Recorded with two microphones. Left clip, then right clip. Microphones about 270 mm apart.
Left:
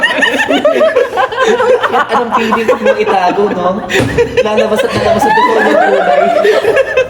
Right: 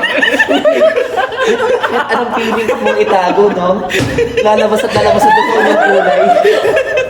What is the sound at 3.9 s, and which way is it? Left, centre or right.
Speech, centre.